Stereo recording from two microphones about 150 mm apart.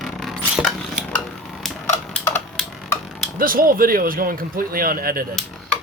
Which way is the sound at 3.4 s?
70° right (ahead or behind).